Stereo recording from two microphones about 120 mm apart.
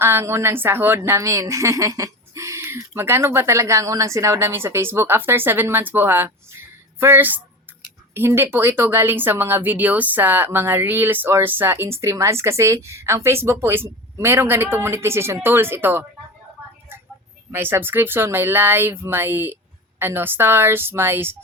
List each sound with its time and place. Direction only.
0.0 s speech: 20° right (ahead or behind)
17.5 s speech: 20° right (ahead or behind)